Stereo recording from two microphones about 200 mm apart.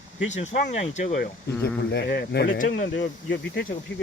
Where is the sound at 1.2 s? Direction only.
55° left (ahead or behind).